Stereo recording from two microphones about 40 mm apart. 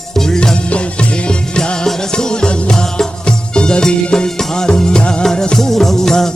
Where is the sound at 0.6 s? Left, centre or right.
Left.